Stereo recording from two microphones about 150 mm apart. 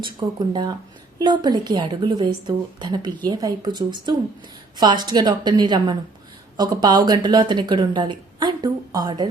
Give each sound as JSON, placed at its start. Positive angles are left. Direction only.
{"t": 0.0, "sound": "a woman's voice", "side_deg": -30}